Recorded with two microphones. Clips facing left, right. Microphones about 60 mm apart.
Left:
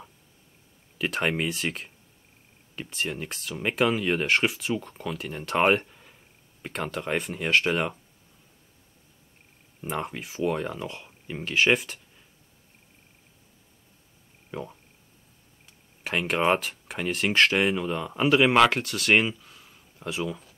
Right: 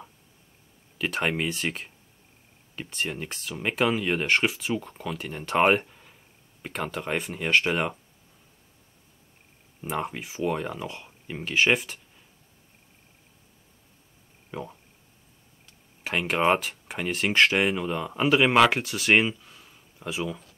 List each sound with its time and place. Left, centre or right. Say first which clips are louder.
0.9 s speech: even; centre
9.8 s speech: right 1 dB; centre
14.5 s speech: even; centre
16.0 s speech: even; centre